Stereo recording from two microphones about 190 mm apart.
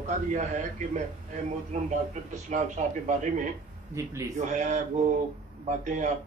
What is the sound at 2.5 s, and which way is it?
Speech, 40° right (ahead or behind).